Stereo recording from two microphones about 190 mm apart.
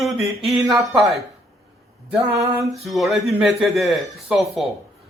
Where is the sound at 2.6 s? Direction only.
Centre (ahead or behind).